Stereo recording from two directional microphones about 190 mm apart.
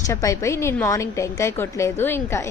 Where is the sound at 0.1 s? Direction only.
15° left (ahead or behind).